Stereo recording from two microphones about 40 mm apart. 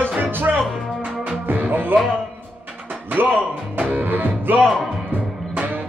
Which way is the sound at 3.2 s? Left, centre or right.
Right.